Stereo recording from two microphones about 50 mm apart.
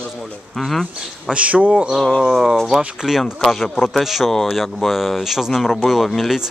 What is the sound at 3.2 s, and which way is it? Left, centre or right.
Speech, centre.